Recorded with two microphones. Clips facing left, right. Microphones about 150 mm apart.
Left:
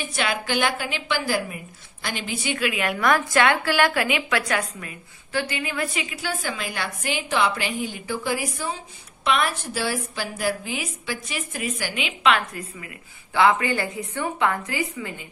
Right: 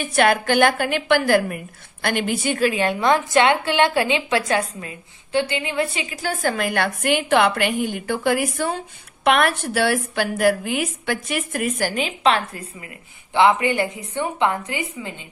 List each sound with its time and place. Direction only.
0.0 s a woman's voice: 55° right (ahead or behind); by 6.3 s 35° right (ahead or behind)
6.4 s a woman's voice: 55° right (ahead or behind); by 12.6 s 30° right (ahead or behind)
13.3 s a woman's voice: 20° right (ahead or behind)